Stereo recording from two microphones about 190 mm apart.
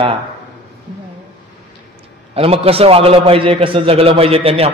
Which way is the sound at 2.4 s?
30° right (ahead or behind).